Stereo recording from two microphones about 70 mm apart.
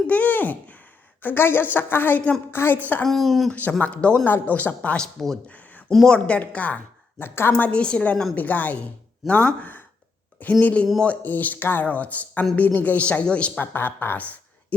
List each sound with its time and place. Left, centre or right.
0.1 s a sound: left
1.2 s a woman's voice: left
3.0 s speech: centre
3.5 s speech: left
5.5 s a sound: left
6.1 s speech: centre
7.3 s a woman's voice: left
7.5 s a woman's voice: centre
8.4 s speech: left
13.7 s speech: left